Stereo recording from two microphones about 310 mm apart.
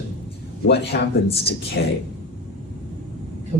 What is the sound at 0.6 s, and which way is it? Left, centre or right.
Speech, left.